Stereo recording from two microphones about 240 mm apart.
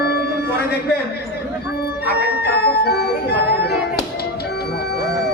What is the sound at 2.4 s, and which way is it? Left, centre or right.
Music, left.